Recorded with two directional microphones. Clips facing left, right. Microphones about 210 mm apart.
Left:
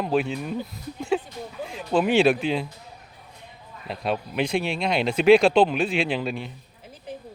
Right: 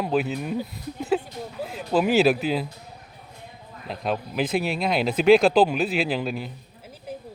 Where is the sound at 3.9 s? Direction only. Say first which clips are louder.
Even; centre (ahead or behind).